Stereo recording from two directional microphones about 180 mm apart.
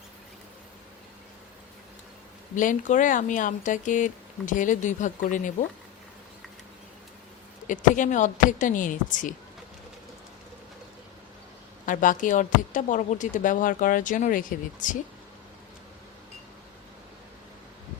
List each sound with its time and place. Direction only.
2.6 s speech: 45° left (ahead or behind)
7.7 s speech: 45° left (ahead or behind)
11.9 s speech: 45° left (ahead or behind)